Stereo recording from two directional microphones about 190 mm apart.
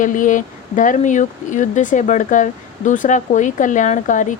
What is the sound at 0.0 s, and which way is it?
Speech, 45° left (ahead or behind).